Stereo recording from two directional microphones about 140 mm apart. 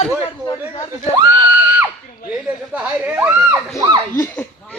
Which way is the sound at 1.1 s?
20° right (ahead or behind).